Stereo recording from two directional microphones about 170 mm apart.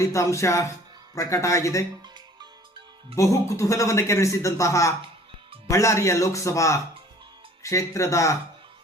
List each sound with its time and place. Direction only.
0.0 s a man's voice: 20° left (ahead or behind)
3.2 s a man's voice: 20° left (ahead or behind)